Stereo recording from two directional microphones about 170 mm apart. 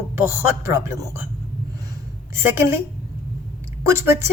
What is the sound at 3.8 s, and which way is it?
Speech, 15° right (ahead or behind).